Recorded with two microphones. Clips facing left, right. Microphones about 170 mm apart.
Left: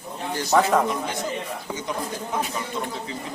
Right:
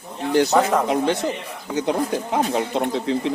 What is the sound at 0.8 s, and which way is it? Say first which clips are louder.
Speech: right 7 dB; 70° right (ahead or behind).